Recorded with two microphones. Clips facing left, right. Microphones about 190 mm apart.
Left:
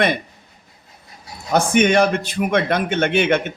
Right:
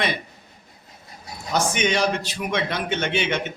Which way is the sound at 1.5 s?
55° left (ahead or behind).